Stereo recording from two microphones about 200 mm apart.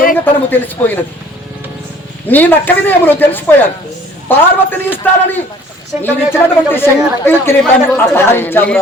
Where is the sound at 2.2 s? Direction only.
10° left (ahead or behind).